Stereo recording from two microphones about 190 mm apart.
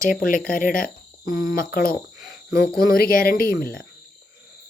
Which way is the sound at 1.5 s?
50° left (ahead or behind).